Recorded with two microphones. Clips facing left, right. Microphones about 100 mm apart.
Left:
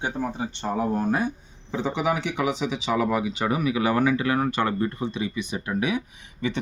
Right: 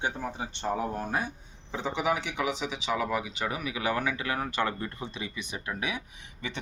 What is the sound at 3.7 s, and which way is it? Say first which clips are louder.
Speech: left 8 dB; 50° left (ahead or behind).